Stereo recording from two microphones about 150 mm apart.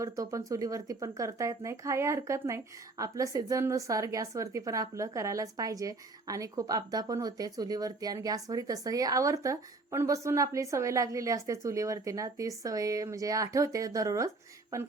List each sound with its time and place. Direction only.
0.0 s a woman's voice: 20° right (ahead or behind)